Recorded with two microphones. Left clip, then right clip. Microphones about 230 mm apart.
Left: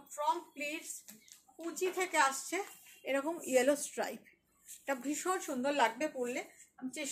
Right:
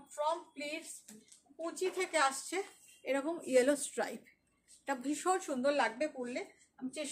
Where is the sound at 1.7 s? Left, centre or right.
Centre.